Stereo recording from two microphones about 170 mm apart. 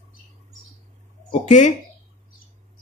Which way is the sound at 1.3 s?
45° left (ahead or behind).